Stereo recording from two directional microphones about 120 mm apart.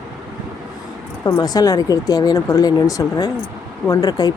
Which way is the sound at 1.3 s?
30° left (ahead or behind).